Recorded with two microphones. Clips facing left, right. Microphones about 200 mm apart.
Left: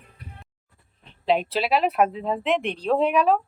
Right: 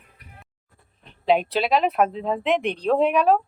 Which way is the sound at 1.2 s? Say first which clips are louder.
Right 2 dB; centre (ahead or behind).